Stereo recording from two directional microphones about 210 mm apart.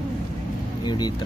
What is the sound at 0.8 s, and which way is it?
Speech, 20° left (ahead or behind).